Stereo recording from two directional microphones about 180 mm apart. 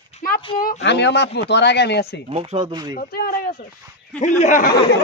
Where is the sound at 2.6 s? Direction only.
20° right (ahead or behind).